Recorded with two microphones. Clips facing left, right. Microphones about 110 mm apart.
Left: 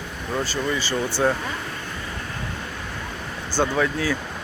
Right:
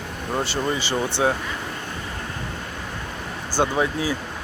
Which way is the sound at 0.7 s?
20° right (ahead or behind).